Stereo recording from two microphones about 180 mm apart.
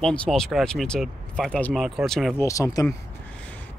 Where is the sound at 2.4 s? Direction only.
20° left (ahead or behind).